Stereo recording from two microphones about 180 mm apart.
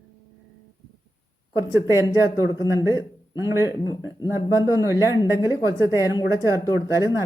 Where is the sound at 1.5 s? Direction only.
15° right (ahead or behind).